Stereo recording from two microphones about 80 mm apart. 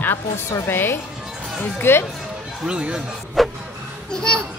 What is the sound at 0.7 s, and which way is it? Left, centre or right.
Speech, left.